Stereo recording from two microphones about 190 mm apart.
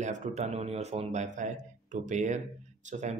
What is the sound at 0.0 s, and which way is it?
Speech, 40° right (ahead or behind).